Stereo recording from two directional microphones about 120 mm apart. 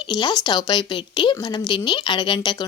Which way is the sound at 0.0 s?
40° left (ahead or behind).